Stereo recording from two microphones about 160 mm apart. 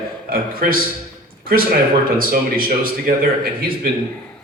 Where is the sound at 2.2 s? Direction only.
65° right (ahead or behind).